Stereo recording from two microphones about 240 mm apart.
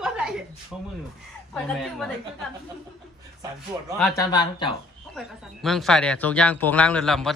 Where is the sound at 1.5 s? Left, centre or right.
Centre.